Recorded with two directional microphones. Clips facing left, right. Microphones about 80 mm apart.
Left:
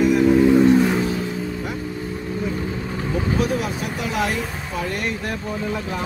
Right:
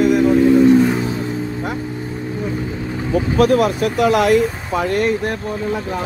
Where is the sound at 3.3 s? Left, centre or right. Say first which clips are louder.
Right 13 dB; right.